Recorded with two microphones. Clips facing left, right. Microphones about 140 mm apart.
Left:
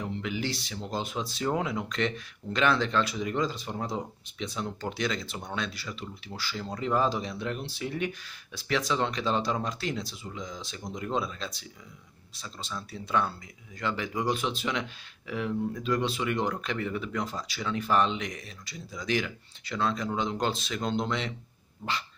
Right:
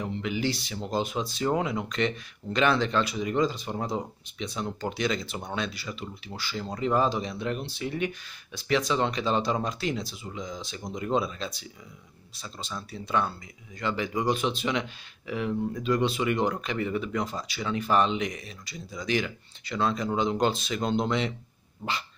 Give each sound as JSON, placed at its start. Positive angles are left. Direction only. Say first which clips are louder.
{"t": 0.0, "sound": "speech", "louder": "right 3 dB", "side_deg": 0}
{"t": 21.8, "sound": "dog", "louder": "right 1 dB", "side_deg": -20}